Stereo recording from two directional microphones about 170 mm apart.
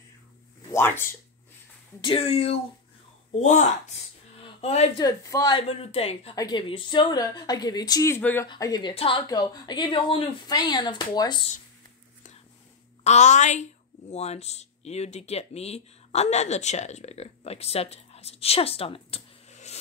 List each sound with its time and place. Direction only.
0.7 s speech: 15° left (ahead or behind)
2.0 s a woman's voice: 30° left (ahead or behind)
5.0 s speech: 20° left (ahead or behind)
5.6 s speech: 35° left (ahead or behind)
6.3 s speech: 25° left (ahead or behind)
8.5 s speech: 20° left (ahead or behind)
13.0 s a woman's voice: 40° left (ahead or behind)